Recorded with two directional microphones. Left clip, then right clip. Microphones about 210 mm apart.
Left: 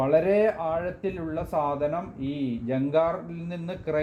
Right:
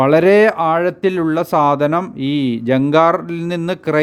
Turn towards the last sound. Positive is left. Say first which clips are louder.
# right 12 dB
turn(degrees=-40)  # may be behind; listen again after turning